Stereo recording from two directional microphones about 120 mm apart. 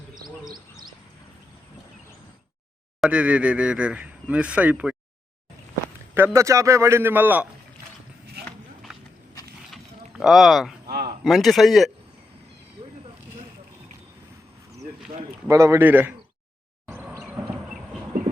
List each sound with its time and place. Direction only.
0.4 s bird: 35° right (ahead or behind)
3.0 s speech: 10° right (ahead or behind)
6.1 s a man's voice: 20° right (ahead or behind)
9.7 s a sound: centre (ahead or behind)
11.2 s a man's voice: centre (ahead or behind)
15.4 s a man's voice: 25° right (ahead or behind)
16.8 s a sound: 10° right (ahead or behind)